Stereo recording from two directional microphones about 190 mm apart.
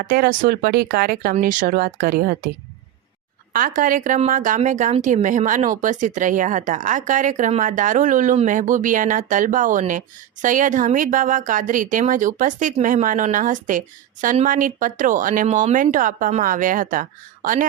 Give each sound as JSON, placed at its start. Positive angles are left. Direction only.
{"t": 0.0, "sound": "speech", "side_deg": -50}
{"t": 3.5, "sound": "speech", "side_deg": -45}